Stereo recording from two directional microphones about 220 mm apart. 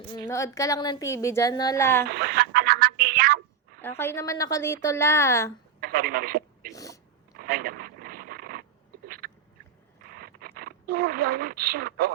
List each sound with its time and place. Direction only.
0.1 s a woman's voice: 15° left (ahead or behind)
2.0 s a sound: 45° right (ahead or behind)
3.8 s a woman's voice: 10° left (ahead or behind)
5.8 s speech: 40° right (ahead or behind)
6.7 s biting: 15° left (ahead or behind)
7.3 s a sound: 40° right (ahead or behind)